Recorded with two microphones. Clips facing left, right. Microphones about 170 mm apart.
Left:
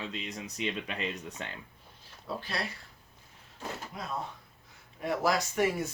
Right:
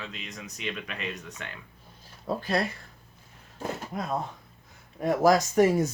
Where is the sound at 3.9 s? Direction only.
50° right (ahead or behind).